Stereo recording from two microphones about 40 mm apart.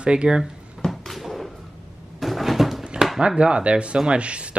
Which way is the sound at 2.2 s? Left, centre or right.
Centre.